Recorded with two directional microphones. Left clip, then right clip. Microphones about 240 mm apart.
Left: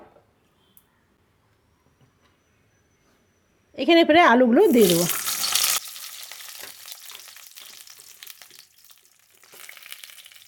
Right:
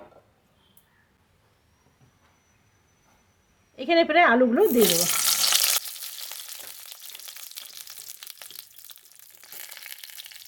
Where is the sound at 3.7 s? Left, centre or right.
Left.